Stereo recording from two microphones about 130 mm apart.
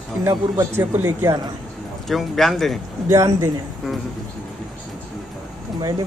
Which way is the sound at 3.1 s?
25° right (ahead or behind).